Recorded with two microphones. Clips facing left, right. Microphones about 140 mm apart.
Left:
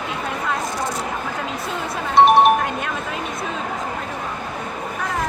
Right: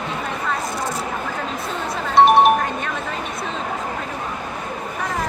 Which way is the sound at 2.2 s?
Centre (ahead or behind).